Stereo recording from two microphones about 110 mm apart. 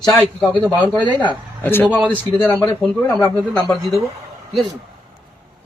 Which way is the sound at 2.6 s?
5° left (ahead or behind).